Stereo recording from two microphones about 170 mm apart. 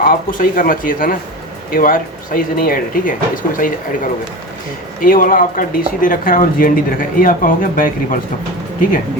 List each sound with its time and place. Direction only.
0.0 s speech: 55° left (ahead or behind)